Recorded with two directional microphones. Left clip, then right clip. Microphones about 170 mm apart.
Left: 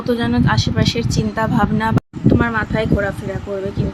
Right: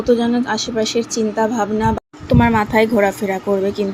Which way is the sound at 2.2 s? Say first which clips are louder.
Right 3 dB; 15° right (ahead or behind).